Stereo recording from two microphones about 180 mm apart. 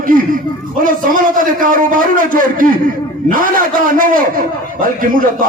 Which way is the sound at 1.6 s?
50° right (ahead or behind).